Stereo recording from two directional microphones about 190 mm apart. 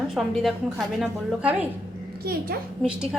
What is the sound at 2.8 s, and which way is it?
Speech, 5° right (ahead or behind).